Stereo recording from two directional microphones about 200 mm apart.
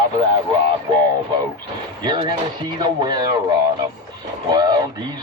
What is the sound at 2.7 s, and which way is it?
Speech, 20° right (ahead or behind).